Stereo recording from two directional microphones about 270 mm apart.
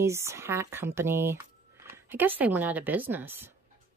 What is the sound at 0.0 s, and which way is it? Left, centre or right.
Speech, centre.